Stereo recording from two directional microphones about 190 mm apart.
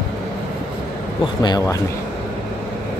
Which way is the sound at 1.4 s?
20° left (ahead or behind).